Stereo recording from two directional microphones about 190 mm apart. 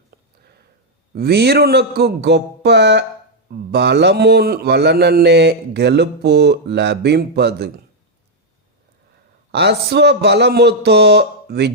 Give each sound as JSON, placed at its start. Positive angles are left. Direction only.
{"t": 1.1, "sound": "a man's voice", "side_deg": -55}
{"t": 9.5, "sound": "a man's voice", "side_deg": -60}